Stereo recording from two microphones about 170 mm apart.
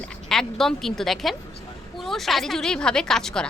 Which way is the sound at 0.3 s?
5° left (ahead or behind).